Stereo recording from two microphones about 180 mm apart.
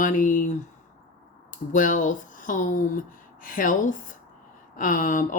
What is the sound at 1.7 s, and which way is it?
Speech, 45° left (ahead or behind).